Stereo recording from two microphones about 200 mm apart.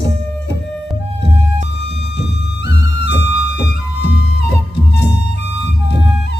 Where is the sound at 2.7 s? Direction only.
60° left (ahead or behind).